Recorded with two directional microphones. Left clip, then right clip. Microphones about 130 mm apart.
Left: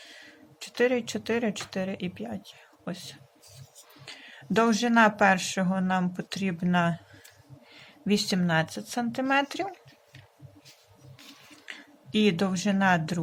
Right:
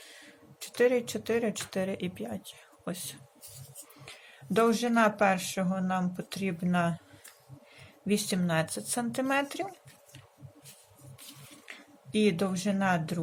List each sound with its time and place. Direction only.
0.0 s a sound: 5° left (ahead or behind)
1.7 s speech: 5° left (ahead or behind)
4.0 s speech: 15° left (ahead or behind)
8.7 s speech: centre (ahead or behind)
11.6 s speech: 10° left (ahead or behind)